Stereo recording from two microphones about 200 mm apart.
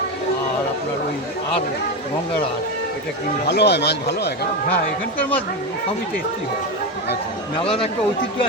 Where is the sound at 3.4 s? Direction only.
55° left (ahead or behind).